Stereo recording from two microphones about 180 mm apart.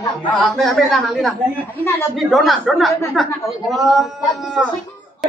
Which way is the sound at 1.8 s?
15° left (ahead or behind).